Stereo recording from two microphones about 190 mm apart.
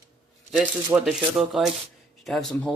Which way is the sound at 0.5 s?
Centre (ahead or behind).